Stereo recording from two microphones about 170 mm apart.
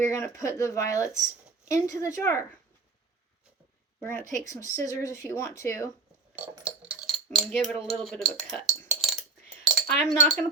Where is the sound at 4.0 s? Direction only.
10° left (ahead or behind).